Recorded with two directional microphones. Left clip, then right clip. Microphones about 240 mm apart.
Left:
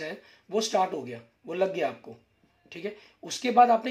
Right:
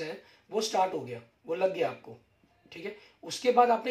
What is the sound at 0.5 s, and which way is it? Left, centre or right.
Speech, left.